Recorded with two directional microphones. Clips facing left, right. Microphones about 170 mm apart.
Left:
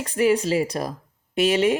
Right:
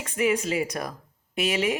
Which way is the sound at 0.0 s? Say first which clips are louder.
Left 5 dB; 35° left (ahead or behind).